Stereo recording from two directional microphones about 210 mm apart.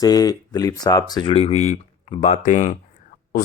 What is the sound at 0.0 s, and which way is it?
Speech, 15° left (ahead or behind).